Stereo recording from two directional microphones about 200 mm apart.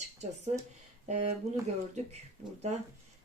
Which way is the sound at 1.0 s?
35° right (ahead or behind).